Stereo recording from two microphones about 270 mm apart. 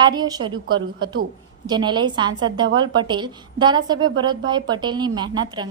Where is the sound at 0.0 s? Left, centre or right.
Centre.